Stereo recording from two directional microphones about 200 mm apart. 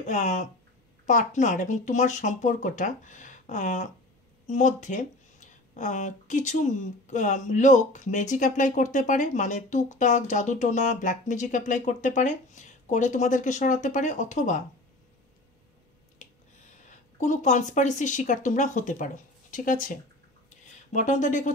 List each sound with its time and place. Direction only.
0.0 s speech: 35° left (ahead or behind)
17.2 s speech: 35° left (ahead or behind)